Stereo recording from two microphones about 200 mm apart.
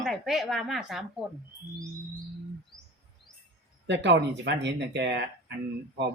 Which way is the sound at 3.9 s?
60° right (ahead or behind).